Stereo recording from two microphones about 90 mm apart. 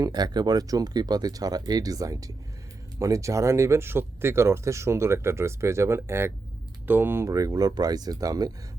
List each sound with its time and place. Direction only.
0.0 s speech: 50° right (ahead or behind); by 7.3 s 25° right (ahead or behind)
7.3 s speech: 40° right (ahead or behind)